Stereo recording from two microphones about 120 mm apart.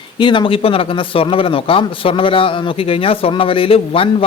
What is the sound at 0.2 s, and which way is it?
A man's voice, 40° left (ahead or behind).